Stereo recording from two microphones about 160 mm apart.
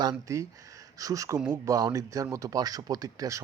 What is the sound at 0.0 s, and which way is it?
Speech, 25° right (ahead or behind).